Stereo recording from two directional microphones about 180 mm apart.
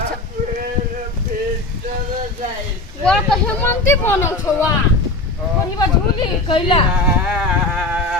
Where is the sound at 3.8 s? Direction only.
15° left (ahead or behind).